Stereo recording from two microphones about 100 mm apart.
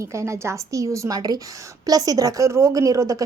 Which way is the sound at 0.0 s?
30° right (ahead or behind).